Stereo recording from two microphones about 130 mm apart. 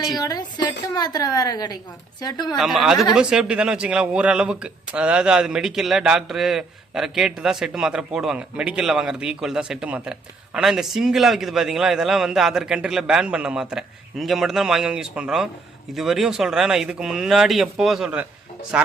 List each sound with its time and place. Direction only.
0.2 s a woman's voice: 30° left (ahead or behind)
2.6 s a man's voice: 5° right (ahead or behind)